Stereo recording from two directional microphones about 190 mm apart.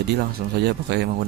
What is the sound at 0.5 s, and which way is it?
Speech, 60° right (ahead or behind).